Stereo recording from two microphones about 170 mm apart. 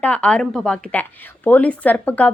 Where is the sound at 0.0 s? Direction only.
5° left (ahead or behind).